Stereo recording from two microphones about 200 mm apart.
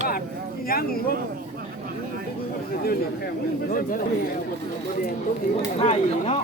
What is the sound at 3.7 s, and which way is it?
Speech, 45° left (ahead or behind).